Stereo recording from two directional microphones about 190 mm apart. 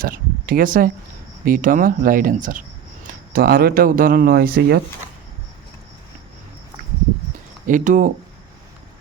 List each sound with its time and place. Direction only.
0.0 s speech: 50° right (ahead or behind)
7.7 s speech: 45° right (ahead or behind)